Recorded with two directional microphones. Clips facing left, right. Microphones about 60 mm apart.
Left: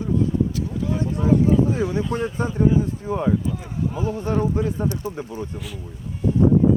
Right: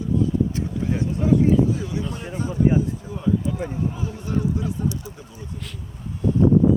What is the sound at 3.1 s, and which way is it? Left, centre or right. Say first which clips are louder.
Speech: left 3 dB; left.